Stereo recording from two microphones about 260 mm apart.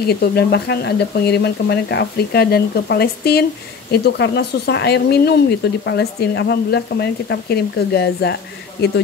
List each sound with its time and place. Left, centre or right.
0.0 s speech: left